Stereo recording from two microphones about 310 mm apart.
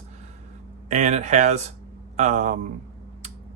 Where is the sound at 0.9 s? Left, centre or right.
Right.